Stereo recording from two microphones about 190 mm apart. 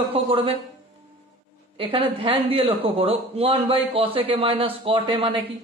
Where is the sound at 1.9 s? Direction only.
30° right (ahead or behind).